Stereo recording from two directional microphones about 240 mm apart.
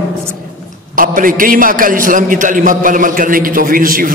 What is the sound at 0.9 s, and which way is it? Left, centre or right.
A man's voice, right.